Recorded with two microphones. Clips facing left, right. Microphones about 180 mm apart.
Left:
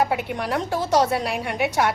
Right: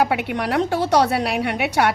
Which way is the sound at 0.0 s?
70° right (ahead or behind).